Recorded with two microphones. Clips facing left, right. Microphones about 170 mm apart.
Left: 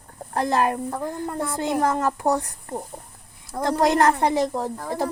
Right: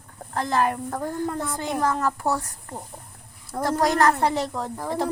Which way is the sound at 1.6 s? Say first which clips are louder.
Left 2 dB; 20° left (ahead or behind).